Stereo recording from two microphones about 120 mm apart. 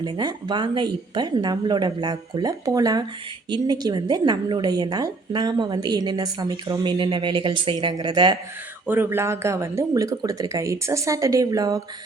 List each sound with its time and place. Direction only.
0.0 s a woman's voice: 40° right (ahead or behind)
8.9 s speech: 20° right (ahead or behind)